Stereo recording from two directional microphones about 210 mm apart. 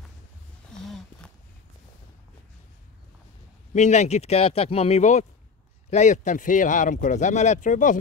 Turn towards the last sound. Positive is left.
turn(degrees=35)  # may be behind; listen again after turning